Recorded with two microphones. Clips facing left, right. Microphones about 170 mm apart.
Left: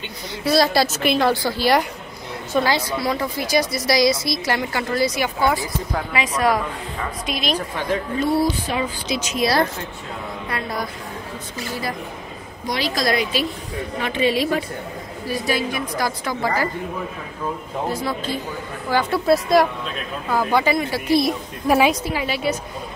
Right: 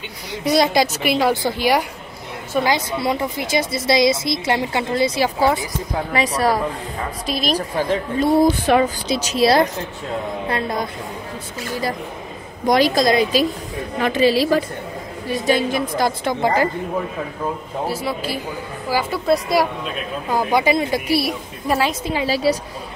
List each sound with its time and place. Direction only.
0.4 s a woman's voice: 20° right (ahead or behind)
12.6 s a woman's voice: 45° right (ahead or behind)
12.9 s speech: 20° right (ahead or behind)
13.2 s a woman's voice: 40° right (ahead or behind)
15.2 s speech: 20° right (ahead or behind)
17.8 s speech: 10° right (ahead or behind)
20.2 s speech: 15° right (ahead or behind)
21.6 s a woman's voice: 10° left (ahead or behind)
22.2 s a woman's voice: 35° right (ahead or behind)